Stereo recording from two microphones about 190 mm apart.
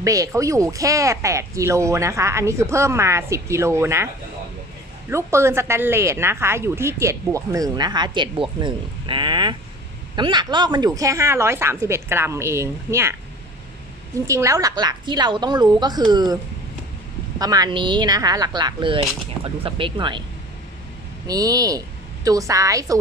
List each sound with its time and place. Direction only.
0.0 s speech: 15° right (ahead or behind)
5.1 s speech: 15° right (ahead or behind)
14.2 s a woman's voice: 15° right (ahead or behind)
17.4 s a woman's voice: 20° right (ahead or behind)
21.3 s a woman's voice: 20° right (ahead or behind)